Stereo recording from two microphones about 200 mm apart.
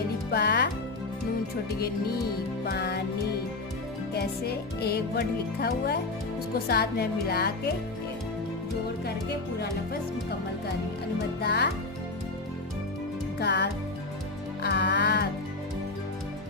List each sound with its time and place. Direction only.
0.3 s speech: 55° left (ahead or behind)
2.6 s music: 55° left (ahead or behind)
4.1 s music: 50° left (ahead or behind)
11.3 s speech: 55° left (ahead or behind)
13.4 s speech: 55° left (ahead or behind)
14.6 s music: 60° left (ahead or behind)